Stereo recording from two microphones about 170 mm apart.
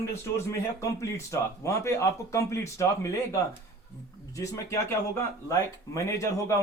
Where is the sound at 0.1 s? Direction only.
15° left (ahead or behind).